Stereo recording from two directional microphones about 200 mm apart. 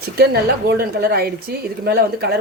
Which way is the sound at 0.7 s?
50° right (ahead or behind).